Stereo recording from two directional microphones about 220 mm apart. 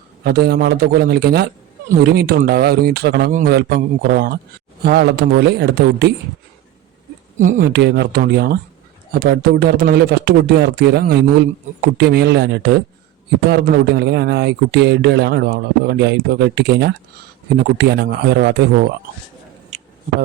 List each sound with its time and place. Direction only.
0.3 s speech: 45° right (ahead or behind)
7.3 s speech: 40° right (ahead or behind)
19.7 s a sound: 30° right (ahead or behind)